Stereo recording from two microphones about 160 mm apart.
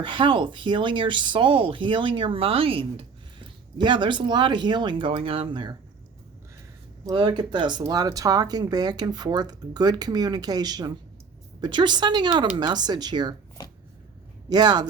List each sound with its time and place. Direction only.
0.0 s speech: 30° right (ahead or behind)
7.0 s speech: 25° right (ahead or behind)
14.5 s speech: 25° right (ahead or behind)